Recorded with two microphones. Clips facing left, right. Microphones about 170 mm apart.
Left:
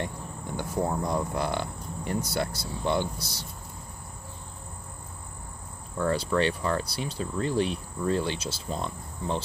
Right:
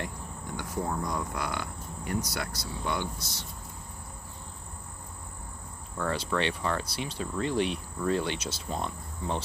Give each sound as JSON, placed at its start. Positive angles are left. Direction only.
{"t": 0.6, "sound": "speech", "side_deg": 30}
{"t": 5.9, "sound": "speech", "side_deg": 35}